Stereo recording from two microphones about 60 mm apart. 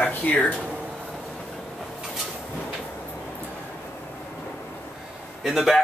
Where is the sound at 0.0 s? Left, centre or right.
Left.